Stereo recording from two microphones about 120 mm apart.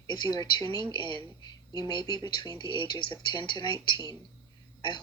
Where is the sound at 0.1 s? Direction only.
35° left (ahead or behind).